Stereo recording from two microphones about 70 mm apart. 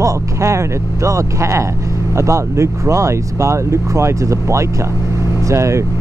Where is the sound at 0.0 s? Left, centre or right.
Right.